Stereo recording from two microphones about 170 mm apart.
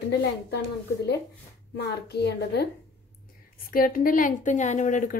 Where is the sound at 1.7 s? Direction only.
75° left (ahead or behind).